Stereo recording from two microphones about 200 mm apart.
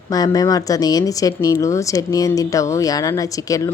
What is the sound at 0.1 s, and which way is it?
A woman's voice, 20° left (ahead or behind).